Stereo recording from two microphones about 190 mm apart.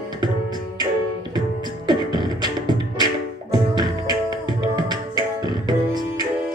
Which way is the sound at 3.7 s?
20° right (ahead or behind).